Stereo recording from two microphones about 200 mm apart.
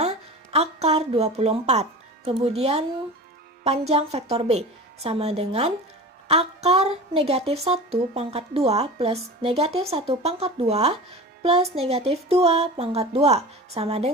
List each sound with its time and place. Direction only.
0.0 s a woman's voice: 30° right (ahead or behind)